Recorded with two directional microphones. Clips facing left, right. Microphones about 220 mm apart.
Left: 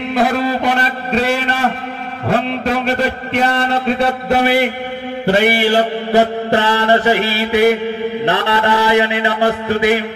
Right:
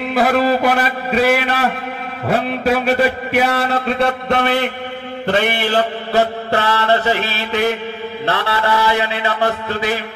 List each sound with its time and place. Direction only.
0.1 s a man's voice: 5° right (ahead or behind)
5.2 s mantra: 10° left (ahead or behind)